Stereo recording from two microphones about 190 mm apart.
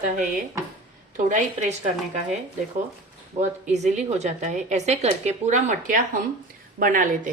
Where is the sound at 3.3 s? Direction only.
40° right (ahead or behind).